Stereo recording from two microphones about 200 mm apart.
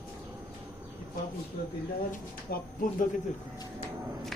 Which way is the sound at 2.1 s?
45° left (ahead or behind).